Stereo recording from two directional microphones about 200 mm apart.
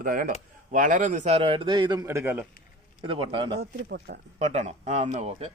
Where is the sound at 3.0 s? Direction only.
25° right (ahead or behind).